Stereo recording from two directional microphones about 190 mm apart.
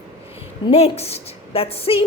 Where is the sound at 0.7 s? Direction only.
30° left (ahead or behind).